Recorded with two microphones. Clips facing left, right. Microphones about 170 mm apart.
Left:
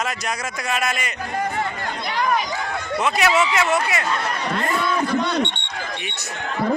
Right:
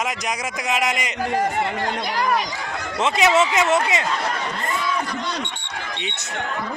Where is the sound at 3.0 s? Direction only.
25° right (ahead or behind).